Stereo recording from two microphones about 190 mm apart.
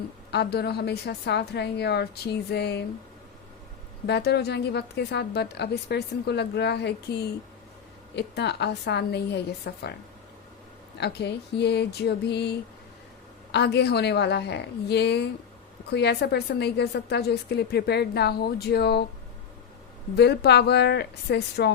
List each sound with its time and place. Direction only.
0.3 s a woman's voice: 60° left (ahead or behind)
4.0 s a woman's voice: 60° left (ahead or behind)
11.0 s a woman's voice: 60° left (ahead or behind)
20.1 s a woman's voice: 60° left (ahead or behind)